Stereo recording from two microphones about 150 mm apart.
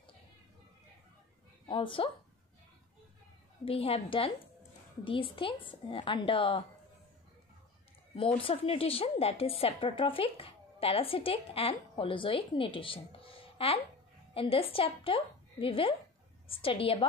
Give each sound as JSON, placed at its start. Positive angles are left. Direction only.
{"t": 1.7, "sound": "a woman's voice", "side_deg": 35}
{"t": 3.6, "sound": "a woman's voice", "side_deg": 40}
{"t": 8.2, "sound": "a woman's voice", "side_deg": 35}